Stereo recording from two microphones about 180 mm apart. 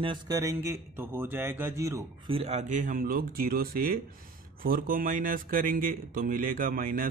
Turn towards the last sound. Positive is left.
turn(degrees=-50)  # may be behind; listen again after turning